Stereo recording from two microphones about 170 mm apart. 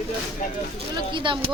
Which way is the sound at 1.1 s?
30° right (ahead or behind).